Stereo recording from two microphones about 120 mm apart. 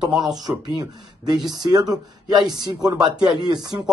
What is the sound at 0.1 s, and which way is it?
Speech, 35° right (ahead or behind).